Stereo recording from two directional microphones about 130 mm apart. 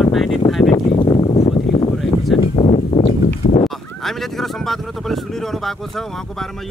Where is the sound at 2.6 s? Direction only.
60° left (ahead or behind).